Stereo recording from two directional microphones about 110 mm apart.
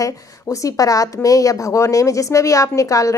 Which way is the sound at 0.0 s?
30° left (ahead or behind).